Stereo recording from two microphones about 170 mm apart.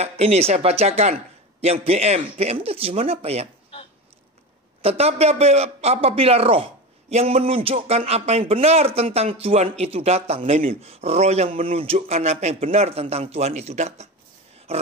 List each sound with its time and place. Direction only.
0.0 s a man's voice: 40° right (ahead or behind)
4.8 s a man's voice: 35° right (ahead or behind)
14.7 s a sound: 35° right (ahead or behind)